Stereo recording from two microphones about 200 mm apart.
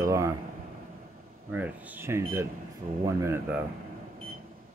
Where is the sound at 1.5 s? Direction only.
10° right (ahead or behind).